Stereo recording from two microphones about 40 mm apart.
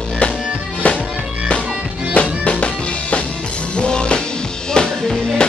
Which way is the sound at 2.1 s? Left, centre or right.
Left.